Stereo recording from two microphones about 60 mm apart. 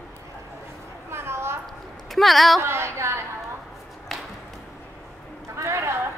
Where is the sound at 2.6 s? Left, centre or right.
Right.